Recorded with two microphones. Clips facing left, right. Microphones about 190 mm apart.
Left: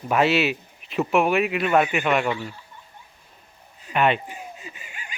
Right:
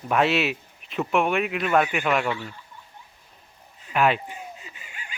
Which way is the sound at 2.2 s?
15° left (ahead or behind).